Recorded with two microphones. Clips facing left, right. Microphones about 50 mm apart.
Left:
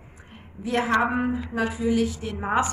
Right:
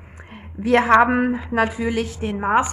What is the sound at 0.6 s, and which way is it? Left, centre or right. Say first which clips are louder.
A woman's voice: right 8 dB; right.